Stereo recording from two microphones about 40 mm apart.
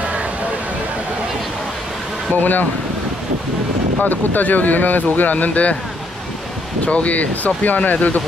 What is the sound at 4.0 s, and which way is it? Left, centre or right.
Speech, left.